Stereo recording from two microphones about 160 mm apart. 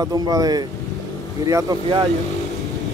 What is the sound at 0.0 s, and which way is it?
Speech, 25° right (ahead or behind).